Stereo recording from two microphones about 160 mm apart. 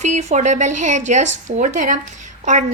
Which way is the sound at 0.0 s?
45° right (ahead or behind).